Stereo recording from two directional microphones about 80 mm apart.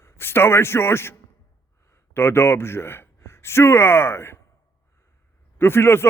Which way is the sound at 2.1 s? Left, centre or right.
Left.